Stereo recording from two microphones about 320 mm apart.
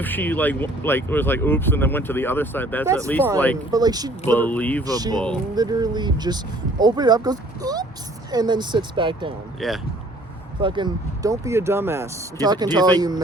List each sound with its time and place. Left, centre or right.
0.0 s speech: centre
2.8 s speech: centre
4.3 s speech: centre
4.8 s speech: centre
9.6 s speech: centre
10.6 s speech: centre